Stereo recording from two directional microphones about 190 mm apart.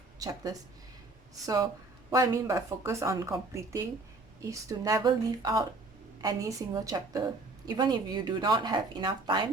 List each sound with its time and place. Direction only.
0.2 s speech: 20° right (ahead or behind)